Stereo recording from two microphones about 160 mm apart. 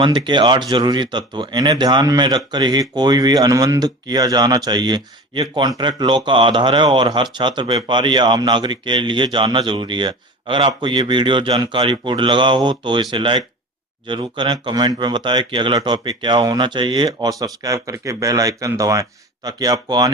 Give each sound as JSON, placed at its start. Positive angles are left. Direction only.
{"t": 0.0, "sound": "speech", "side_deg": -30}